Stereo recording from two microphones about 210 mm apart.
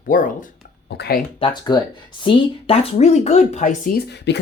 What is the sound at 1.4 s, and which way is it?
Speech, 20° left (ahead or behind).